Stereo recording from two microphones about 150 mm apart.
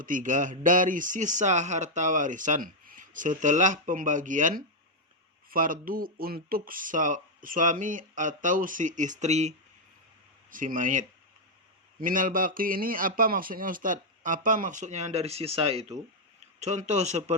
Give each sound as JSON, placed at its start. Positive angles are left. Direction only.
{"t": 0.0, "sound": "speech", "side_deg": -60}
{"t": 10.5, "sound": "a man's voice", "side_deg": -65}